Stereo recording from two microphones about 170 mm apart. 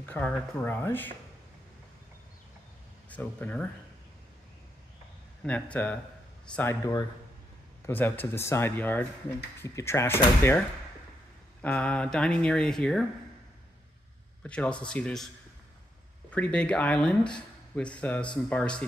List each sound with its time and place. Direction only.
0.1 s speech: 10° left (ahead or behind)
3.1 s speech: 10° left (ahead or behind)
5.4 s speech: 5° left (ahead or behind)
11.6 s speech: 5° left (ahead or behind)
14.4 s speech: 5° left (ahead or behind)
16.3 s speech: 10° left (ahead or behind)